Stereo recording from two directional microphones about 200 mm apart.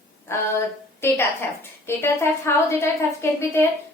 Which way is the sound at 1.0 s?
10° left (ahead or behind).